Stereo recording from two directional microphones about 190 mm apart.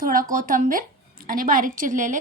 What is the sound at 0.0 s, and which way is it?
A woman's voice, 45° right (ahead or behind).